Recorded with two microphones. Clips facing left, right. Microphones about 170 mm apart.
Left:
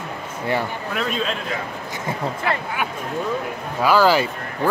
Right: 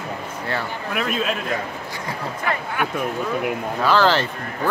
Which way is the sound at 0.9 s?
5° right (ahead or behind).